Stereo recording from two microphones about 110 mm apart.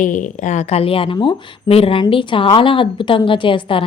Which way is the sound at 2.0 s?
50° left (ahead or behind).